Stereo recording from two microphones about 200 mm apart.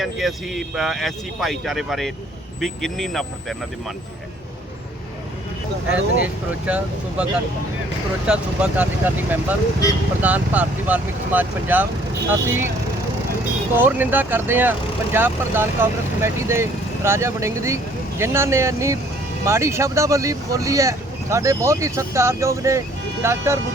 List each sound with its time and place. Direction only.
0.0 s speech: centre (ahead or behind)
5.9 s speech: 70° right (ahead or behind)
6.2 s speech: 5° right (ahead or behind)
8.3 s speech: 5° right (ahead or behind)
13.7 s speech: 10° right (ahead or behind)